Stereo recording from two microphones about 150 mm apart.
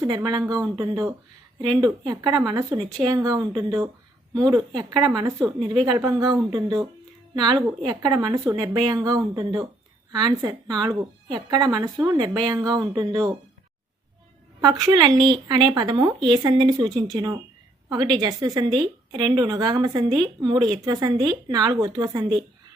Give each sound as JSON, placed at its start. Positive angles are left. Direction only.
{"t": 0.1, "sound": "a woman's voice", "side_deg": -30}
{"t": 3.2, "sound": "a woman's voice", "side_deg": -25}
{"t": 14.6, "sound": "a woman's voice", "side_deg": -25}